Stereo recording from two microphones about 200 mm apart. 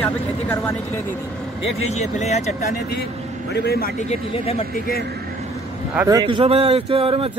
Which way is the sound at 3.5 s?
55° left (ahead or behind).